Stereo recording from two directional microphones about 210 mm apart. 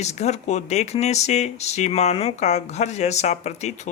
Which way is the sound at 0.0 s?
30° left (ahead or behind).